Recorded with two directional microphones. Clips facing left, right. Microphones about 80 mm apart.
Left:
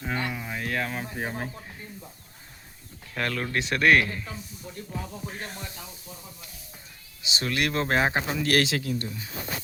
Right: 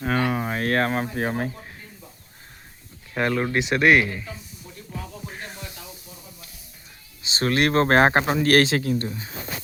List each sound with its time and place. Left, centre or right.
0.0 s a sound: right
3.2 s speech: right
7.2 s speech: right
8.4 s speech: right